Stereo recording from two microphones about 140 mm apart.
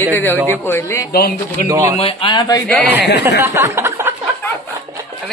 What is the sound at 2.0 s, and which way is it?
Speech, 45° left (ahead or behind).